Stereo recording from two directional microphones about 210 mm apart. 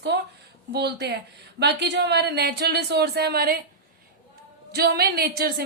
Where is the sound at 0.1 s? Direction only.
50° right (ahead or behind).